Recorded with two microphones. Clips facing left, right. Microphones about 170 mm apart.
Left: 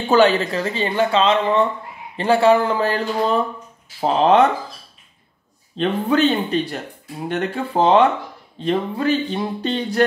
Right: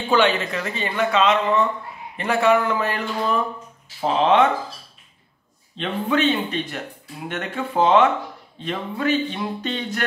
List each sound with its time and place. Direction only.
0.1 s speech: 35° left (ahead or behind)
5.8 s speech: 35° left (ahead or behind)